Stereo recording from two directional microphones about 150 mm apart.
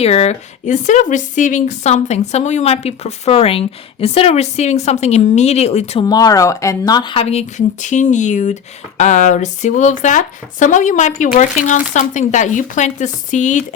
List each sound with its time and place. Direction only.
0.0 s speech: 45° left (ahead or behind)
6.1 s speech: 25° left (ahead or behind)
7.2 s speech: 45° left (ahead or behind)